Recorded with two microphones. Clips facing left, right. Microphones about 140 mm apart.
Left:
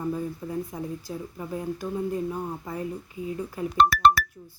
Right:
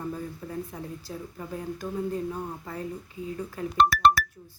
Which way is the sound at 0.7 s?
15° left (ahead or behind).